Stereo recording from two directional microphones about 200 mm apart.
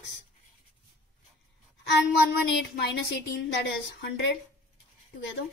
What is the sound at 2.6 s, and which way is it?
A woman's voice, 55° left (ahead or behind).